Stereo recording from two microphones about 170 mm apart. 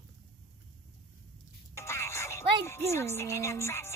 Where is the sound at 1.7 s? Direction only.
15° left (ahead or behind).